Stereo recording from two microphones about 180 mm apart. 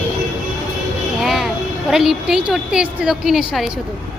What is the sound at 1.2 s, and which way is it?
A woman's voice, centre (ahead or behind).